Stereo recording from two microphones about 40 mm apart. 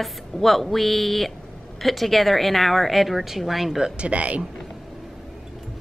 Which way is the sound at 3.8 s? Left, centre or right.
Right.